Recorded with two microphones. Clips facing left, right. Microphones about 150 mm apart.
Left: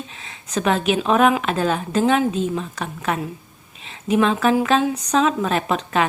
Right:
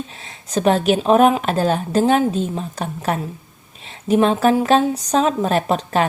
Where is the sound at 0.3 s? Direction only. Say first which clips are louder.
Right 4 dB; 40° right (ahead or behind).